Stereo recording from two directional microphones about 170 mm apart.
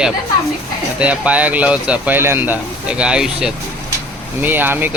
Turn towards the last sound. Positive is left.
turn(degrees=-10)  # may be behind; listen again after turning